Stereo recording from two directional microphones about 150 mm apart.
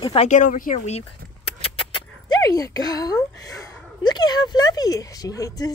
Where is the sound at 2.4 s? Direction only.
25° left (ahead or behind).